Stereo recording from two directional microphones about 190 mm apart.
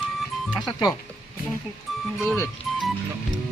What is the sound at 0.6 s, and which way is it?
Speech, 20° left (ahead or behind).